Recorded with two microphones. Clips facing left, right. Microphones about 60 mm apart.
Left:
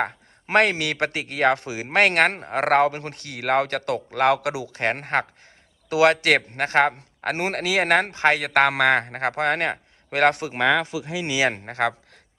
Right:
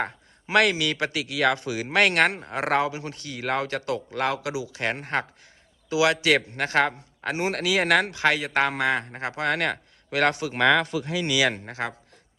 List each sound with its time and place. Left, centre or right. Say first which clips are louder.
0.0 s speech: left 3 dB; left
8.4 s a man's voice: left 5 dB; left
9.5 s a man's voice: left 2 dB; left
10.5 s speech: even; centre
11.3 s speech: left 2 dB; left
11.7 s a man's voice: left 7 dB; left